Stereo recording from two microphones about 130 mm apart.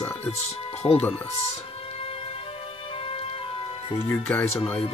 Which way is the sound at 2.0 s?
50° left (ahead or behind).